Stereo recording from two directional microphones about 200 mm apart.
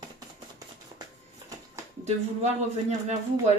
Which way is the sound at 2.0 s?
35° right (ahead or behind).